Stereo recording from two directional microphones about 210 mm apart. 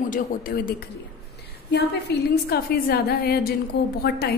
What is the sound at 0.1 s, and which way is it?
A woman's voice, 45° left (ahead or behind).